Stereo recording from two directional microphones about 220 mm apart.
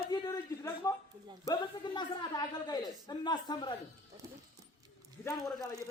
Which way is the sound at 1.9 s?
20° left (ahead or behind).